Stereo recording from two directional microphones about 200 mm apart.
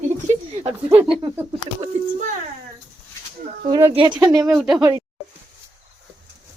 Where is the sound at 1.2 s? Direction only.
20° right (ahead or behind).